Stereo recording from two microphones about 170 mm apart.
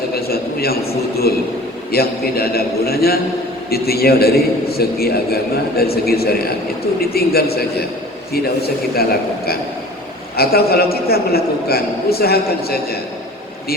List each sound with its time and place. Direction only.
0.1 s a sound: 65° left (ahead or behind)
1.9 s a man's voice: 65° left (ahead or behind)
10.3 s a man's voice: 65° left (ahead or behind)